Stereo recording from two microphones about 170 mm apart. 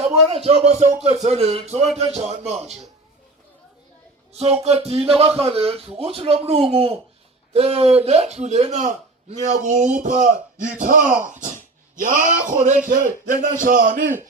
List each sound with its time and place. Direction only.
0.3 s music: 35° right (ahead or behind)
4.3 s music: 40° right (ahead or behind)
9.4 s speech: 45° right (ahead or behind)